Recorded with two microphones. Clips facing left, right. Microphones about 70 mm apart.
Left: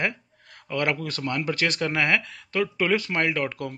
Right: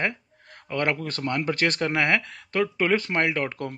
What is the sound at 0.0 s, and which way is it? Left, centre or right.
Speech, right.